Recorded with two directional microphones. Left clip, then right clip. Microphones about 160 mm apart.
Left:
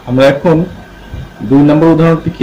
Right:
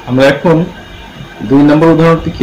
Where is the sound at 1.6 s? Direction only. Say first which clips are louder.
Right 1 dB; 20° left (ahead or behind).